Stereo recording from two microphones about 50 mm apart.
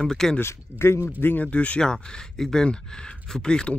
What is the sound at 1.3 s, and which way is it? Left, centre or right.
Speech, left.